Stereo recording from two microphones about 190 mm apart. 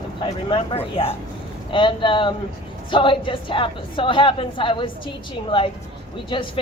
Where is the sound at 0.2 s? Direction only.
25° left (ahead or behind).